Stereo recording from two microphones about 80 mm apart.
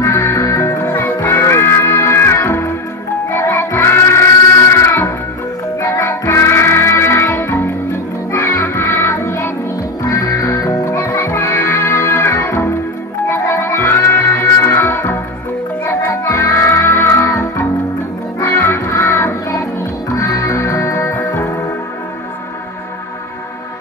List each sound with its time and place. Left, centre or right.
0.0 s music: left